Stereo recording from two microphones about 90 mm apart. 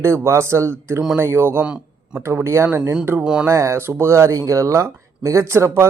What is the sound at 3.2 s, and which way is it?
Speech, 10° right (ahead or behind).